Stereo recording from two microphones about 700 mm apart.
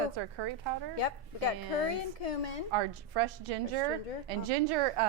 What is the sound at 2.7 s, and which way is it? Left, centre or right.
A woman's voice, right.